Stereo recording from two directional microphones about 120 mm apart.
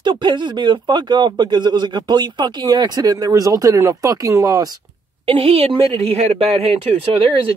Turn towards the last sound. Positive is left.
turn(degrees=-45)  # may be behind; listen again after turning